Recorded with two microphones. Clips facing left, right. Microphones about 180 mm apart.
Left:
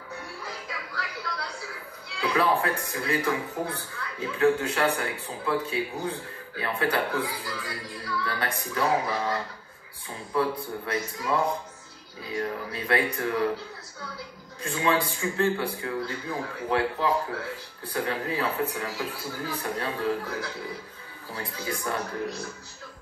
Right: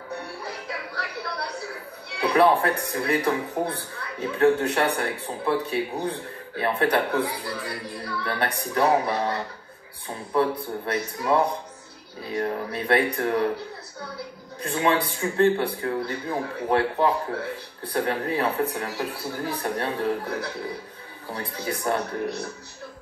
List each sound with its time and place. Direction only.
0.1 s music: 65° right (ahead or behind)
2.1 s a man's voice: 65° right (ahead or behind)
16.6 s a man's voice: 60° right (ahead or behind)